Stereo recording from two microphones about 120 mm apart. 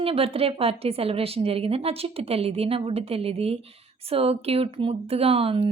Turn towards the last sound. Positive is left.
turn(degrees=-50)  # may be behind; listen again after turning